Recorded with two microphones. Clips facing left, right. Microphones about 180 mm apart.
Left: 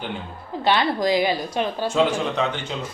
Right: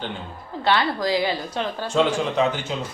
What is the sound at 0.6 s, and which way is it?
A woman's voice, 15° left (ahead or behind).